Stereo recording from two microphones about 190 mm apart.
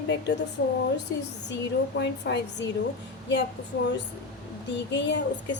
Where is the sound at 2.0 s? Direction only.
65° left (ahead or behind).